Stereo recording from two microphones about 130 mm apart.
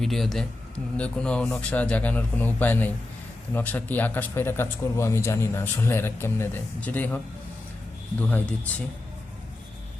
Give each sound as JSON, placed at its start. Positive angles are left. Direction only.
{"t": 0.0, "sound": "speech", "side_deg": 0}
{"t": 8.2, "sound": "speech", "side_deg": 10}